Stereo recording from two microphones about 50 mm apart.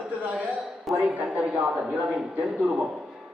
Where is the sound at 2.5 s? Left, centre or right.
Centre.